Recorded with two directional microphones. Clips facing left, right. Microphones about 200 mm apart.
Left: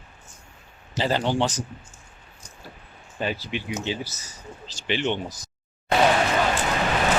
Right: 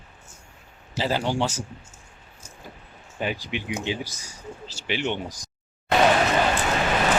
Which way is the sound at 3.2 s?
15° right (ahead or behind).